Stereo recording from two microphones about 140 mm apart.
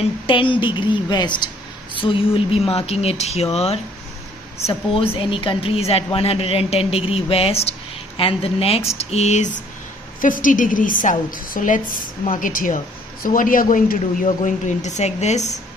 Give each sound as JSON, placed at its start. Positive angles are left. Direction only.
{"t": 0.3, "sound": "a woman's voice", "side_deg": 35}
{"t": 4.9, "sound": "a woman's voice", "side_deg": 40}
{"t": 10.2, "sound": "a woman's voice", "side_deg": 70}